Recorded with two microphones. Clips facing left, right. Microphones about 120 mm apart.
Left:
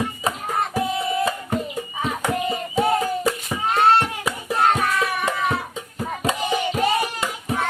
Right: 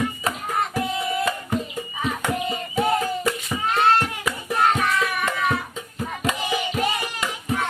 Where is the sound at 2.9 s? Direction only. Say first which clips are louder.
Left 1 dB; 10° left (ahead or behind).